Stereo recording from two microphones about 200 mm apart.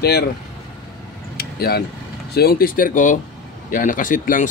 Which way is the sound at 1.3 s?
50° left (ahead or behind).